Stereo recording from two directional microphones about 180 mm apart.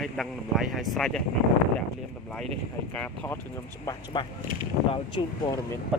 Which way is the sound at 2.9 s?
10° left (ahead or behind).